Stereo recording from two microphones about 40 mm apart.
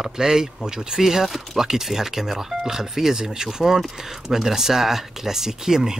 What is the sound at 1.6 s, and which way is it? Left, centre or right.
Speech, centre.